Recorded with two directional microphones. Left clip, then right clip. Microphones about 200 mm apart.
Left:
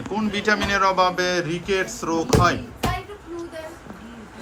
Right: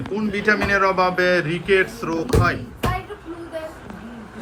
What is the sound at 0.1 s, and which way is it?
A man's voice, 5° left (ahead or behind).